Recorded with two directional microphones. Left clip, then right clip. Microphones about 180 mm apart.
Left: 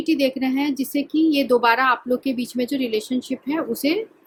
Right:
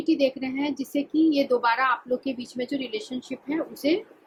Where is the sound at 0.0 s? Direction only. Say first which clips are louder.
Left 3 dB; 55° left (ahead or behind).